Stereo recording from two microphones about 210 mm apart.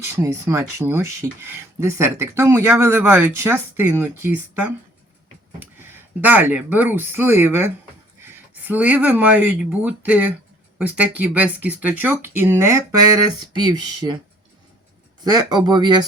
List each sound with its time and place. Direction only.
0.0 s speech: 10° right (ahead or behind)
15.2 s speech: 20° right (ahead or behind)